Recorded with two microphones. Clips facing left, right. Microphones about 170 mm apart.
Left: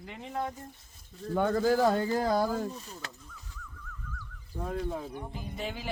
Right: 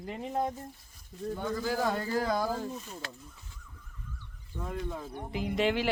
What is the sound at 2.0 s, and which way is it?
Speech, 25° left (ahead or behind).